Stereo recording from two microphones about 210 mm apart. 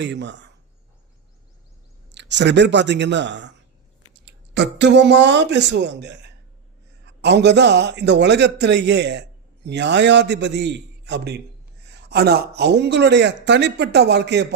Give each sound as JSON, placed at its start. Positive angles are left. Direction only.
{"t": 0.0, "sound": "speech", "side_deg": -55}
{"t": 2.1, "sound": "speech", "side_deg": -55}